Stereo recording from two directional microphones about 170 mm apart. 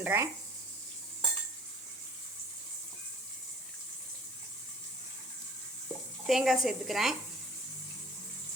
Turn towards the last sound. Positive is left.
turn(degrees=0)  # may be behind; listen again after turning